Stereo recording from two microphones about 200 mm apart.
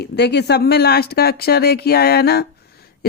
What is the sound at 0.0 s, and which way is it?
A woman's voice, 55° left (ahead or behind).